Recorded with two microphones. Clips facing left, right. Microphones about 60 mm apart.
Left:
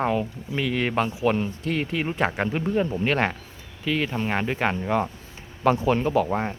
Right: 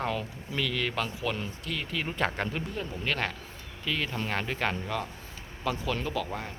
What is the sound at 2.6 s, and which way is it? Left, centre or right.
Speech, left.